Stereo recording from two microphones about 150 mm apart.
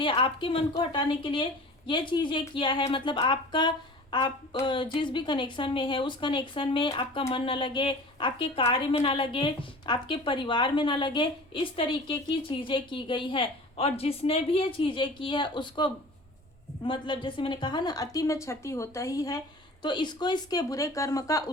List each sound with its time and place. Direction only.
0.0 s a woman's voice: 35° left (ahead or behind)